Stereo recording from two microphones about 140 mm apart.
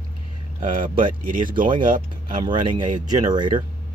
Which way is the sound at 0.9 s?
35° right (ahead or behind).